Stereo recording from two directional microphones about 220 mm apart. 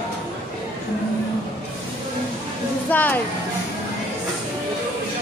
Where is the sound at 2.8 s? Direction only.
5° left (ahead or behind).